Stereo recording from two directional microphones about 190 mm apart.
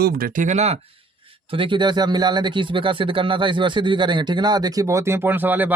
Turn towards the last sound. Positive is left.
turn(degrees=-10)  # may be behind; listen again after turning